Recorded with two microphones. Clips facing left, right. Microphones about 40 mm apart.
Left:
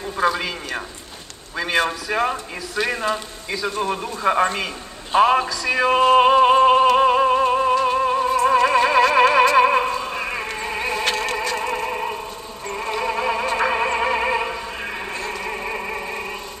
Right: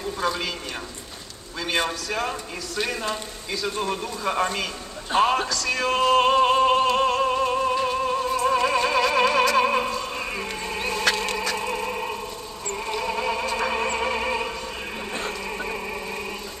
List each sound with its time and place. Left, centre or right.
0.2 s a man's voice: centre
6.1 s a sound: centre
7.0 s music: centre
9.3 s opera: centre
11.4 s a sound: left
12.6 s music: centre